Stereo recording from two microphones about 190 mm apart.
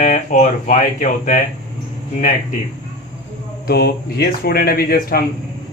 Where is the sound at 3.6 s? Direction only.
55° left (ahead or behind).